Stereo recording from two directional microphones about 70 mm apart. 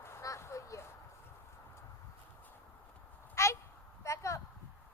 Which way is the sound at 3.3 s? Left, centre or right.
Left.